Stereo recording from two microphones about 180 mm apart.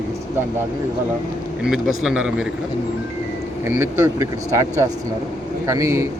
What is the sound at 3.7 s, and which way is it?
Speech, 15° right (ahead or behind).